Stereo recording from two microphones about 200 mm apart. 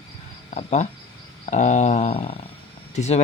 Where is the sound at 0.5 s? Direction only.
35° left (ahead or behind).